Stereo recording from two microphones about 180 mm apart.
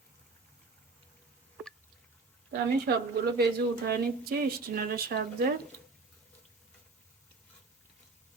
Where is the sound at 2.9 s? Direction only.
60° right (ahead or behind).